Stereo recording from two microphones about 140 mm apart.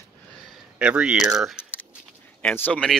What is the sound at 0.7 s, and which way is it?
Speech, 10° right (ahead or behind).